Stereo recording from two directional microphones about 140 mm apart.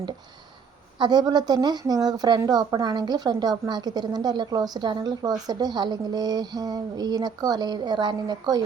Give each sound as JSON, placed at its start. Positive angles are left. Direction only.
{"t": 0.9, "sound": "a woman's voice", "side_deg": -30}